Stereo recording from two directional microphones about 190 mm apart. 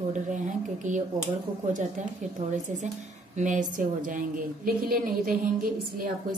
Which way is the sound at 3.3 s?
40° right (ahead or behind).